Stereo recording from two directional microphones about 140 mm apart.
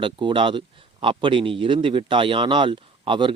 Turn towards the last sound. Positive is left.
turn(degrees=-35)  # may be behind; listen again after turning